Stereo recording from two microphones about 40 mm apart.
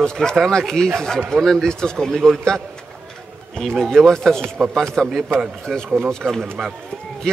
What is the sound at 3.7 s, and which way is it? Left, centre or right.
Speech, centre.